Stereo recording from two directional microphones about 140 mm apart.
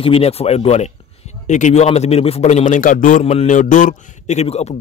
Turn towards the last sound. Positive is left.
turn(degrees=50)  # may be behind; listen again after turning